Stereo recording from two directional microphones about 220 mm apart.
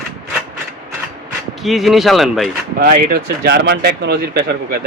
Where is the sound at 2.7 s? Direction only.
45° right (ahead or behind).